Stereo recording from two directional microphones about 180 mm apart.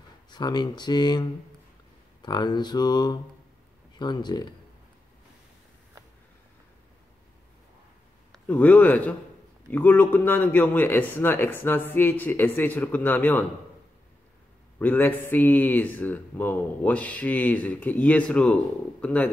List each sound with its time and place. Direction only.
0.3 s speech: 25° left (ahead or behind)
2.2 s speech: 25° left (ahead or behind)
8.3 s speech: 10° left (ahead or behind)
14.8 s speech: 10° left (ahead or behind)